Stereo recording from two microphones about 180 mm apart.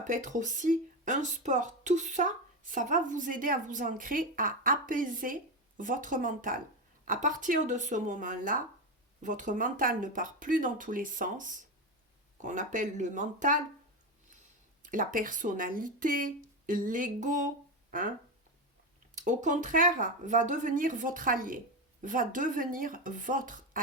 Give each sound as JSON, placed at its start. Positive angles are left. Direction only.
{"t": 0.0, "sound": "speech", "side_deg": -45}
{"t": 14.8, "sound": "speech", "side_deg": -45}
{"t": 19.1, "sound": "speech", "side_deg": -45}